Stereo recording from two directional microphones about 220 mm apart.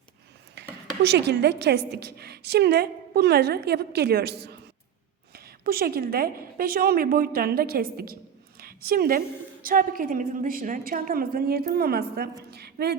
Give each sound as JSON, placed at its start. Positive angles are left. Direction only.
{"t": 0.5, "sound": "a woman's voice", "side_deg": -50}